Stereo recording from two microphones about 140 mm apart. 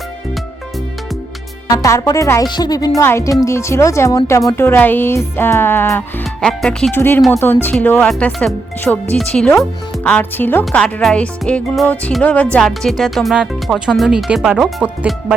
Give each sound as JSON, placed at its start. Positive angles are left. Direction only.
{"t": 1.7, "sound": "speech", "side_deg": 25}
{"t": 6.4, "sound": "speech", "side_deg": 5}
{"t": 6.9, "sound": "speech", "side_deg": 15}